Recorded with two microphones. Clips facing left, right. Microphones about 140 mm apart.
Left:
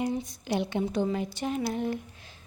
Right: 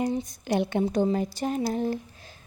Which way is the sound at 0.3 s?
50° right (ahead or behind).